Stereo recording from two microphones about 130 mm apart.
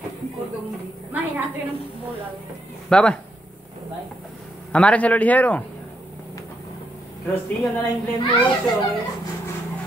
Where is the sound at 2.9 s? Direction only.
5° left (ahead or behind).